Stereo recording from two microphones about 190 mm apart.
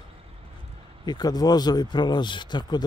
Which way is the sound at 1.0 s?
20° left (ahead or behind).